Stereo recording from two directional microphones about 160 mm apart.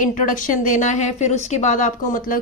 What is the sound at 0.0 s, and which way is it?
Speech, 55° left (ahead or behind).